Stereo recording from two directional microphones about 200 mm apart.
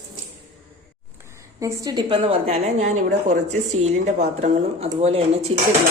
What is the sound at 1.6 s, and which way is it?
A woman's voice, 15° right (ahead or behind).